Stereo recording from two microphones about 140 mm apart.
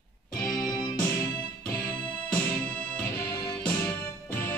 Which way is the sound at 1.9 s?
10° left (ahead or behind).